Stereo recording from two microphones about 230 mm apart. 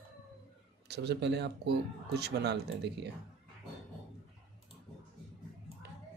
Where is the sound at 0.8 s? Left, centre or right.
Right.